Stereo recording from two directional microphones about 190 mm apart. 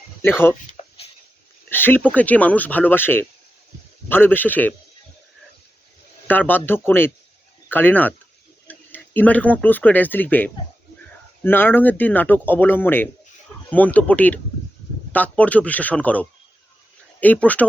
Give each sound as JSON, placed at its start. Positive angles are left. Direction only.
{"t": 0.2, "sound": "speech", "side_deg": 10}
{"t": 0.8, "sound": "a sound", "side_deg": 35}
{"t": 1.7, "sound": "speech", "side_deg": 10}
{"t": 6.2, "sound": "speech", "side_deg": 10}